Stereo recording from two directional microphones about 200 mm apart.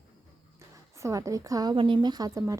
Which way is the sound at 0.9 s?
15° right (ahead or behind).